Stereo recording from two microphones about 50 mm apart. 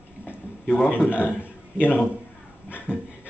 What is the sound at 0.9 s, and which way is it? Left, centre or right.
Speech, left.